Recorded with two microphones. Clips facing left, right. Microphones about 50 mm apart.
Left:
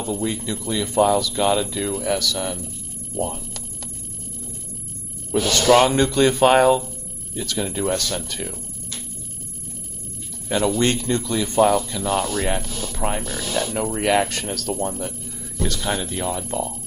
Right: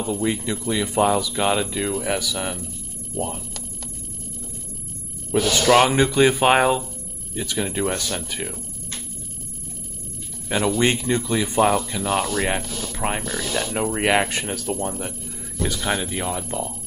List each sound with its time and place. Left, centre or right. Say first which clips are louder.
0.0 s speech: right 1 dB; centre
5.3 s speech: left 1 dB; centre
10.8 s speech: even; centre